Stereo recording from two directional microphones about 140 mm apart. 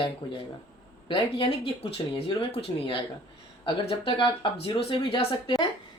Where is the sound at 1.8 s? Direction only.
40° left (ahead or behind).